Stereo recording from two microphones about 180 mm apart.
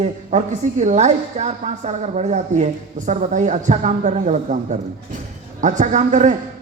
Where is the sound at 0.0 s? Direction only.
40° right (ahead or behind).